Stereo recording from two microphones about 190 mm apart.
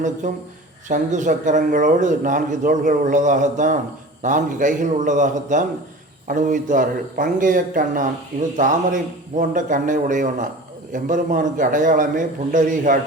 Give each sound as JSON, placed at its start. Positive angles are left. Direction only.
{"t": 0.2, "sound": "a man's voice", "side_deg": -40}